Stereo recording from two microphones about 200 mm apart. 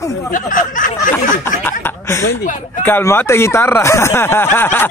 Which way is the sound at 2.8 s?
10° left (ahead or behind).